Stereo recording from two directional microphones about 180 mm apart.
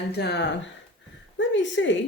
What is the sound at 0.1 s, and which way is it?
Speech, 65° left (ahead or behind).